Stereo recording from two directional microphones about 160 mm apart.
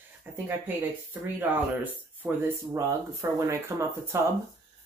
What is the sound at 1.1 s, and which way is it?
Speech, 10° right (ahead or behind).